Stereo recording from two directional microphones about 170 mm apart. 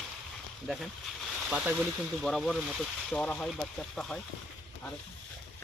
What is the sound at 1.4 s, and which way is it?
Speech, 5° right (ahead or behind).